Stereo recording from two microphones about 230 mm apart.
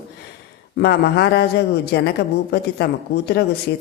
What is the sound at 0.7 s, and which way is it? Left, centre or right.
Speech, left.